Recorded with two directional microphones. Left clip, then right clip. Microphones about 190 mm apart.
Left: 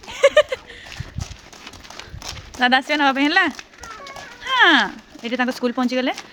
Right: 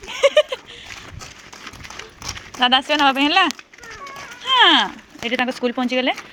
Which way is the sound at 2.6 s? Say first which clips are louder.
Right 1 dB; 15° left (ahead or behind).